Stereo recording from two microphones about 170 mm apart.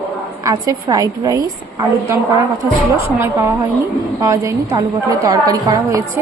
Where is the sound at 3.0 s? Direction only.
15° right (ahead or behind).